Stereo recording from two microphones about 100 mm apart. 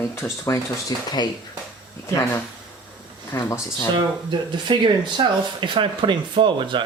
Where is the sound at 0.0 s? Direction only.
25° left (ahead or behind).